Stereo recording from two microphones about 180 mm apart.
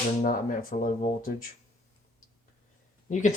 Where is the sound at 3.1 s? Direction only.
45° left (ahead or behind).